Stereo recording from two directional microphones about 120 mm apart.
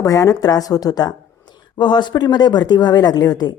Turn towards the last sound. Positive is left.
turn(degrees=35)  # may be behind; listen again after turning